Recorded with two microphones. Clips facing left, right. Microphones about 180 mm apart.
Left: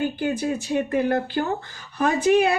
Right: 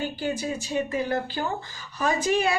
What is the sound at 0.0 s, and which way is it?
A woman's voice, 60° left (ahead or behind).